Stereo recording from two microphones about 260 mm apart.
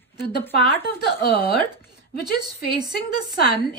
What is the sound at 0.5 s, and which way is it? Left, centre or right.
Speech, left.